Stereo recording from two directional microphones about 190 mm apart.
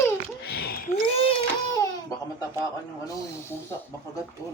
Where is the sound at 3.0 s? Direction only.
15° left (ahead or behind).